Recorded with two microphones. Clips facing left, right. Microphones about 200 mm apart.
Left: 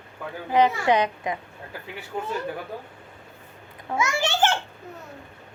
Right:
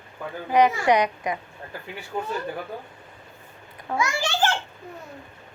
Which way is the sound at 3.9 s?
20° left (ahead or behind).